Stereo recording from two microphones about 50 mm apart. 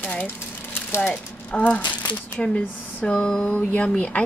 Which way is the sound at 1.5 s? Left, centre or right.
Left.